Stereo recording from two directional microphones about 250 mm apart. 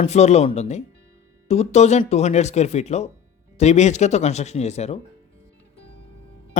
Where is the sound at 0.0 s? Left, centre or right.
Left.